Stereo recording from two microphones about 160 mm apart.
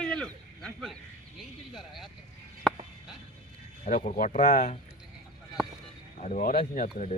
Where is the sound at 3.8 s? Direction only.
50° left (ahead or behind).